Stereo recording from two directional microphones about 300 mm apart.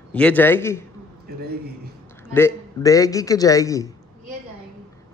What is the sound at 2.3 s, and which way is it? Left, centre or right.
A man's voice, centre.